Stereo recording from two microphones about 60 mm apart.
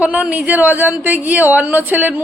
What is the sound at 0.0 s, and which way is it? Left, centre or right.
A woman's voice, right.